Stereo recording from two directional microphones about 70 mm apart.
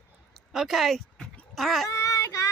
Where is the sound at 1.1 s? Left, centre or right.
Centre.